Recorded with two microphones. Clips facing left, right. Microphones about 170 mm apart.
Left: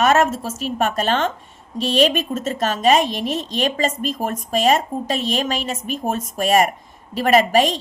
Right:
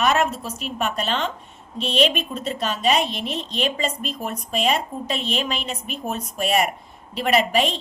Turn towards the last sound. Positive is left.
turn(degrees=45)  # may be behind; listen again after turning